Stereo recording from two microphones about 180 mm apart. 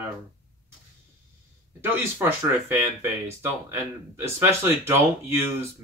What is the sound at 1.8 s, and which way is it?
Speech, 10° right (ahead or behind).